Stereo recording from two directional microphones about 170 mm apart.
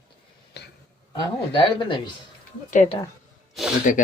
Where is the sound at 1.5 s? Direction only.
30° left (ahead or behind).